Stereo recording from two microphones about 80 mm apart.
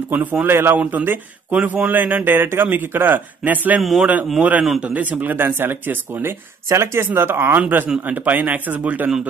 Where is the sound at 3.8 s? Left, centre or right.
Centre.